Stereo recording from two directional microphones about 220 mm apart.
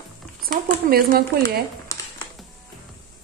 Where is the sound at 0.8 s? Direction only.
45° right (ahead or behind).